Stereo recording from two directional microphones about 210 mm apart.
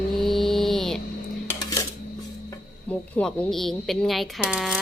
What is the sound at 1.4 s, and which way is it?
Coin, 15° left (ahead or behind).